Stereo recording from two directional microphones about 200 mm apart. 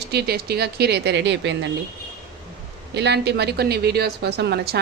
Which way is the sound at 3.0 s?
60° right (ahead or behind).